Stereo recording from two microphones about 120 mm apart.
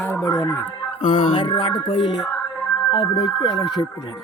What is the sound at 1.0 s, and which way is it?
Music, 45° left (ahead or behind).